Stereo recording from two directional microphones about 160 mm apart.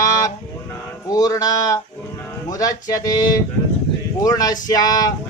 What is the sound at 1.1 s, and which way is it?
Speech, 20° left (ahead or behind).